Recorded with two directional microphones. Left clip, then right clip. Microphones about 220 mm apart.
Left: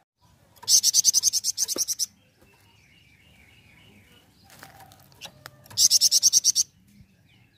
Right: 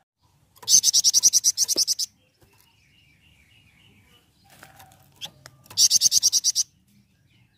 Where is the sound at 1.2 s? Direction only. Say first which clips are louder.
Right 6 dB; 20° right (ahead or behind).